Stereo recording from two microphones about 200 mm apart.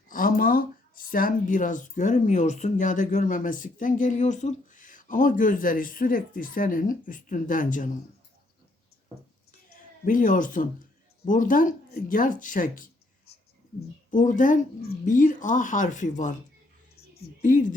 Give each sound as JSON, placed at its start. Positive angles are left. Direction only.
{"t": 0.1, "sound": "speech", "side_deg": 45}
{"t": 10.1, "sound": "speech", "side_deg": 40}